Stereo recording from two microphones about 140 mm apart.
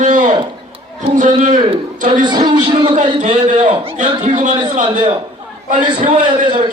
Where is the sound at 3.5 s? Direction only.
60° right (ahead or behind).